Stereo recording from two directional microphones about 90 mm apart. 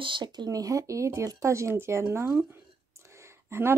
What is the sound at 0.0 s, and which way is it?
A woman's voice, 60° right (ahead or behind).